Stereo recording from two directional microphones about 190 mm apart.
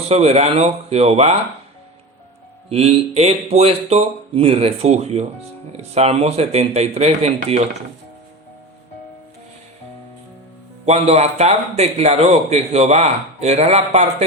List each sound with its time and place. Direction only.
0.1 s a man's voice: 35° right (ahead or behind)
2.6 s a man's voice: 35° right (ahead or behind)
10.8 s a man's voice: 35° right (ahead or behind)